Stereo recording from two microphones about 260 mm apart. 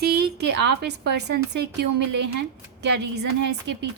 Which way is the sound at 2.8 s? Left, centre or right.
Right.